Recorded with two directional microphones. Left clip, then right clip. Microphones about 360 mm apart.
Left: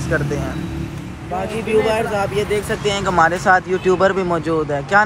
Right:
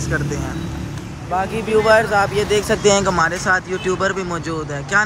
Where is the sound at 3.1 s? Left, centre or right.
Centre.